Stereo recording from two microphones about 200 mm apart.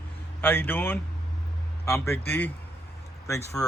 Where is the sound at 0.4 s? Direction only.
10° left (ahead or behind).